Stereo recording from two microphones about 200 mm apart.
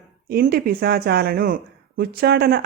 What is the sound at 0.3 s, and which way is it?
Speech, 50° right (ahead or behind).